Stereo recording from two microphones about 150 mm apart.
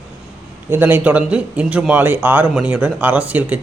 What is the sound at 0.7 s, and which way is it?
A man's voice, 15° right (ahead or behind).